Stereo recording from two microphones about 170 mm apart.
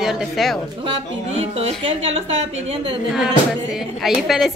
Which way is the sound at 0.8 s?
35° right (ahead or behind).